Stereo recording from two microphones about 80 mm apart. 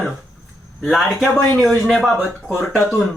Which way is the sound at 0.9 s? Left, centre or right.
Centre.